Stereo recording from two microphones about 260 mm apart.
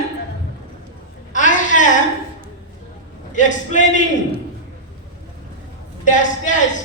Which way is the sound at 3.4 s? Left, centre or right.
Left.